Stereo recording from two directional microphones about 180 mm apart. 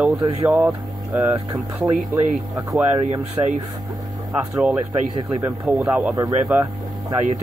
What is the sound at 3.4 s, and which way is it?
Speech, 10° right (ahead or behind).